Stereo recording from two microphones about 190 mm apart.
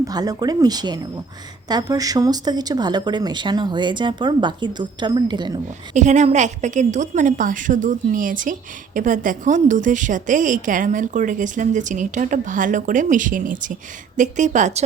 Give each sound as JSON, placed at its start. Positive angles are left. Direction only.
{"t": 0.0, "sound": "speech", "side_deg": -20}
{"t": 5.9, "sound": "a woman's voice", "side_deg": -40}